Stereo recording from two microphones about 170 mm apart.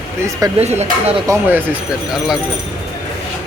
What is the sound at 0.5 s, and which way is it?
Speech, 40° right (ahead or behind).